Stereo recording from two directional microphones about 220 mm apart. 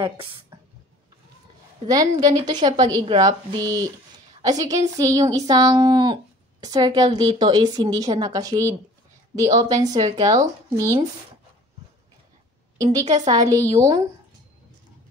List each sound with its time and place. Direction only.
1.9 s a woman's voice: 20° right (ahead or behind)
12.7 s speech: 15° right (ahead or behind)